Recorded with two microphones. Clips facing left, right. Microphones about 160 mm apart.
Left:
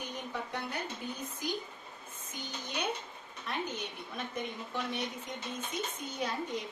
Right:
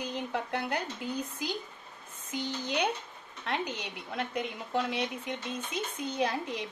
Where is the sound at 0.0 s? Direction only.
85° right.